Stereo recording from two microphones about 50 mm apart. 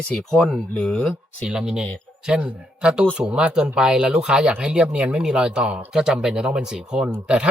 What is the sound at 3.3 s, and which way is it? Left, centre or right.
Speech, right.